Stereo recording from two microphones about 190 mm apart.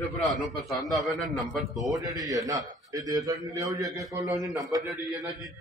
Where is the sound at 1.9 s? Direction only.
20° right (ahead or behind).